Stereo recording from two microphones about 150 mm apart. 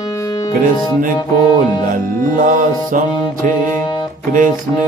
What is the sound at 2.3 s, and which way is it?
Music, 65° right (ahead or behind).